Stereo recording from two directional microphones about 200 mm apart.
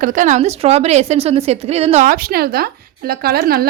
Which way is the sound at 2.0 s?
45° right (ahead or behind).